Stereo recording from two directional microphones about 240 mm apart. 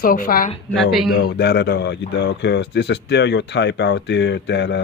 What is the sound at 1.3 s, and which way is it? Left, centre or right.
Speech, left.